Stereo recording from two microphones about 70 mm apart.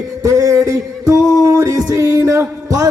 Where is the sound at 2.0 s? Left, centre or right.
Right.